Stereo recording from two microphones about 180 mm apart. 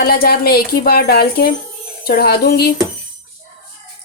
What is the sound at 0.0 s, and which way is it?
A woman's voice, 55° left (ahead or behind).